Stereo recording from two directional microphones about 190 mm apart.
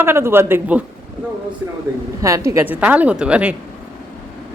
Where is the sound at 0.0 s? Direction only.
10° right (ahead or behind).